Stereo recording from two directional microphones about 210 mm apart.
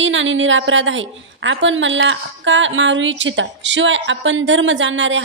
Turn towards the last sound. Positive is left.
turn(degrees=-60)  # may be behind; listen again after turning